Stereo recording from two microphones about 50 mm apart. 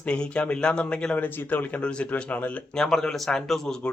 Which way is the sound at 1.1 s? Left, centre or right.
Left.